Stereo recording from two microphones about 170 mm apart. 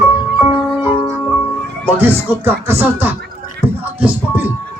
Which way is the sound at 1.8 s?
10° right (ahead or behind).